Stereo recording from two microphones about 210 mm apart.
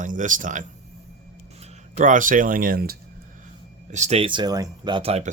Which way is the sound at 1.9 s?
40° right (ahead or behind).